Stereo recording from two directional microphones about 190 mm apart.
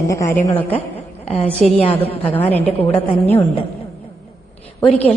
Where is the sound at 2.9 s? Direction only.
35° left (ahead or behind).